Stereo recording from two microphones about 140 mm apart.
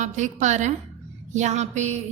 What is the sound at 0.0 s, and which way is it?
A woman's voice, 60° right (ahead or behind).